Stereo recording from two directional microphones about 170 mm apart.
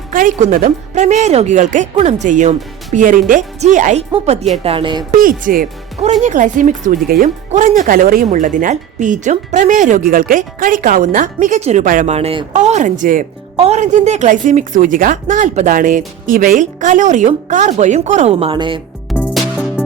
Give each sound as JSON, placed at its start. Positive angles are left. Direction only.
{"t": 0.1, "sound": "speech", "side_deg": -50}
{"t": 5.1, "sound": "speech", "side_deg": -55}
{"t": 19.1, "sound": "music", "side_deg": 0}